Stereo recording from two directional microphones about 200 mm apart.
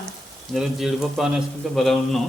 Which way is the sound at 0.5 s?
Centre (ahead or behind).